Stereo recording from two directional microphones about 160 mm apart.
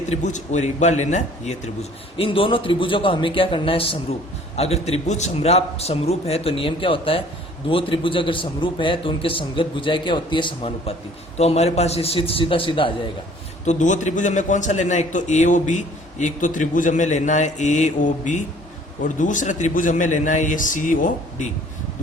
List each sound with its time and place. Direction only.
0.1 s a man's voice: 50° left (ahead or behind); by 12.9 s 30° left (ahead or behind)
13.7 s a man's voice: 50° left (ahead or behind)